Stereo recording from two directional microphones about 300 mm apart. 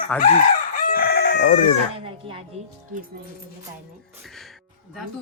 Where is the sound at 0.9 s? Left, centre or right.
Left.